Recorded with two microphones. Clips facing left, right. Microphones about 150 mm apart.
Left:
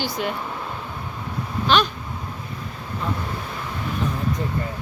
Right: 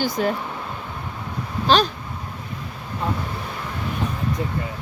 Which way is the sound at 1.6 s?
35° right (ahead or behind).